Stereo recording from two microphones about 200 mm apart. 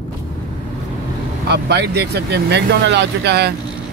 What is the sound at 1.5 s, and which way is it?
Speech, 55° right (ahead or behind).